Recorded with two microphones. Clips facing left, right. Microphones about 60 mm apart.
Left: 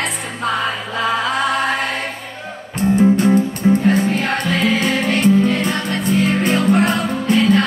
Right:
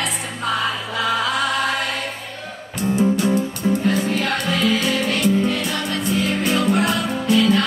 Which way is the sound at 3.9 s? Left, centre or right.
Left.